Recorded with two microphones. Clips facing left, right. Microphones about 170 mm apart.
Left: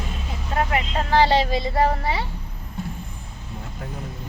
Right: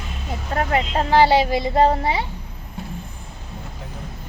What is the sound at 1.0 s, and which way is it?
Child singing, 15° right (ahead or behind).